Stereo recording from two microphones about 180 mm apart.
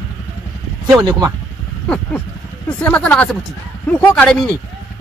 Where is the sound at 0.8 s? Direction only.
20° right (ahead or behind).